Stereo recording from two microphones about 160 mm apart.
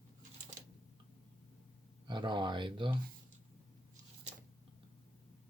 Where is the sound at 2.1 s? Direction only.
30° right (ahead or behind).